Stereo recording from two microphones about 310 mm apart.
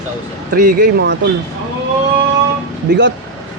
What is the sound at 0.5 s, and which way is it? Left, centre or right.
Speech, right.